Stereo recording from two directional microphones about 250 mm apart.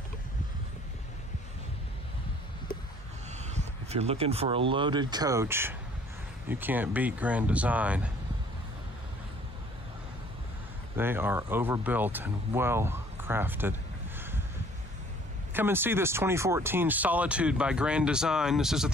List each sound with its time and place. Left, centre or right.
3.4 s speech: right; by 8.1 s centre
11.0 s speech: centre
15.5 s speech: centre